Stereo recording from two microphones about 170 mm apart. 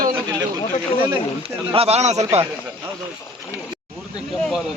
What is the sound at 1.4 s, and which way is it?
A man's voice, 35° right (ahead or behind).